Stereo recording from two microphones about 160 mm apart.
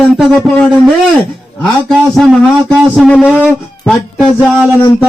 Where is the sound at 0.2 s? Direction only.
5° left (ahead or behind).